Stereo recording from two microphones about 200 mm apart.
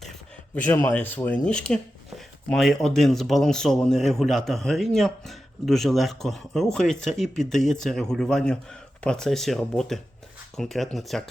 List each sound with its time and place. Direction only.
0.5 s speech: 10° left (ahead or behind)